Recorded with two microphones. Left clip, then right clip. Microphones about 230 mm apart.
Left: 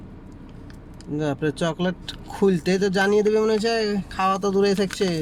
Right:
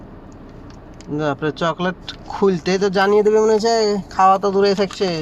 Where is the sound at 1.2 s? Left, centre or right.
Centre.